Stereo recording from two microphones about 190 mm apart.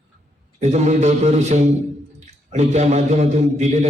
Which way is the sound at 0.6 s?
35° right (ahead or behind).